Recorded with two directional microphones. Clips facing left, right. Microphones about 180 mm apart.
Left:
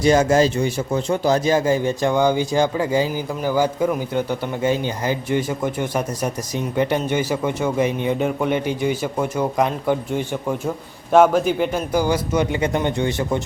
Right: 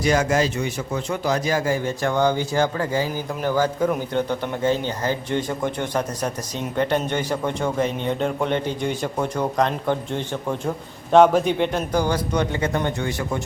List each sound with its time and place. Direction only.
0.0 s a man's voice: 25° left (ahead or behind)